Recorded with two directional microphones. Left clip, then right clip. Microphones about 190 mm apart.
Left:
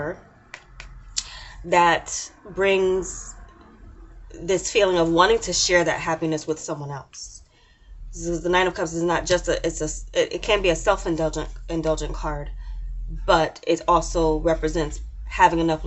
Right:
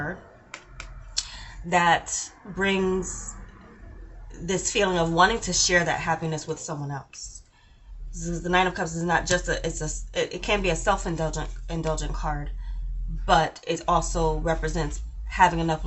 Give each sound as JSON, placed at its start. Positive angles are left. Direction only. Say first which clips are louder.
{"t": 1.1, "sound": "clicking", "louder": "even", "side_deg": 35}
{"t": 2.6, "sound": "speech", "louder": "left 5 dB", "side_deg": 35}
{"t": 4.4, "sound": "speech", "louder": "left 5 dB", "side_deg": 35}
{"t": 8.1, "sound": "speech", "louder": "left 3 dB", "side_deg": 35}